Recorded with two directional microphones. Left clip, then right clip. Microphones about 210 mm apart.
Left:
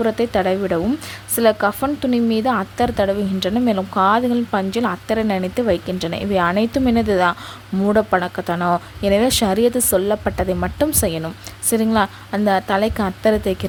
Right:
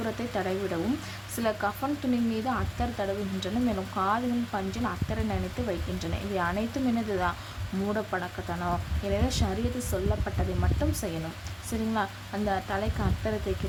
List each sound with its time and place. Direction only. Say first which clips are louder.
0.0 s a woman's voice: left 14 dB; 40° left (ahead or behind)